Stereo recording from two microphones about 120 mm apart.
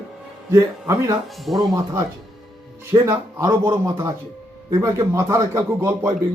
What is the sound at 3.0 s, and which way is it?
A man's voice, 25° right (ahead or behind).